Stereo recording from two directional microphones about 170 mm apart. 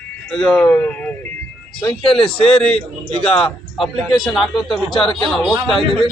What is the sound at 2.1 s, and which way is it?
Speech, 30° left (ahead or behind).